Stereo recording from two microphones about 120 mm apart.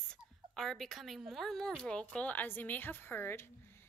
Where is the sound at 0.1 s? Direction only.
5° left (ahead or behind).